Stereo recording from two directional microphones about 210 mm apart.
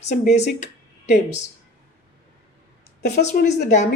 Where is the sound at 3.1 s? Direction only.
45° left (ahead or behind).